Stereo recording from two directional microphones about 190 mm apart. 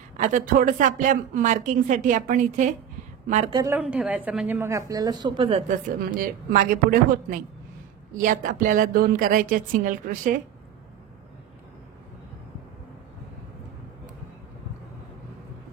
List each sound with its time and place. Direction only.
0.2 s speech: 40° right (ahead or behind)
3.5 s speech: 15° right (ahead or behind)
6.2 s a woman's voice: 45° right (ahead or behind)